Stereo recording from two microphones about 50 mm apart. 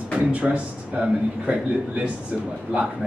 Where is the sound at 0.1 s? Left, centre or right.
Right.